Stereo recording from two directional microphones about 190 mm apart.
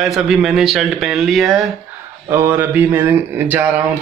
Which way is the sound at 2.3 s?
15° right (ahead or behind).